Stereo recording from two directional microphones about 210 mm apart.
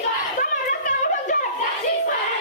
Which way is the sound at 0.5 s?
40° left (ahead or behind).